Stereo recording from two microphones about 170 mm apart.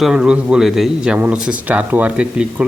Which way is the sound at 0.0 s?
5° right (ahead or behind).